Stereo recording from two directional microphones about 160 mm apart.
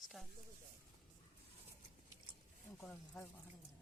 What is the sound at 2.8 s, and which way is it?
Speech, 15° left (ahead or behind).